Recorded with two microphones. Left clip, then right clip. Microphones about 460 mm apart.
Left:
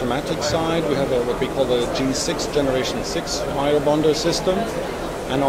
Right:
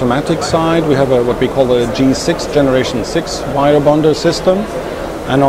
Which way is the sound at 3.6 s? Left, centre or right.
Right.